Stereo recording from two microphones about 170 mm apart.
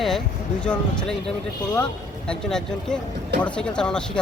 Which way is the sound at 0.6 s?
5° left (ahead or behind).